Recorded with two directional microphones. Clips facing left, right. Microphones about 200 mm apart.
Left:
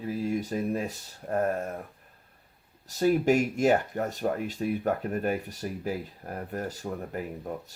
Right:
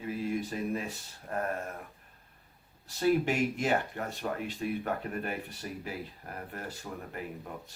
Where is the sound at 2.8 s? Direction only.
40° left (ahead or behind).